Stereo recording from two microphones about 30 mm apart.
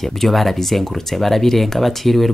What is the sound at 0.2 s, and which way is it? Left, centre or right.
Speech, centre.